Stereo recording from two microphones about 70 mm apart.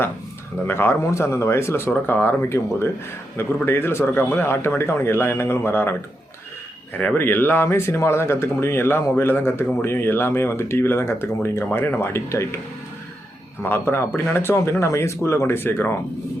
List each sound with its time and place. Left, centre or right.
0.7 s speech: left
1.9 s speech: left
7.0 s speech: left
13.6 s speech: left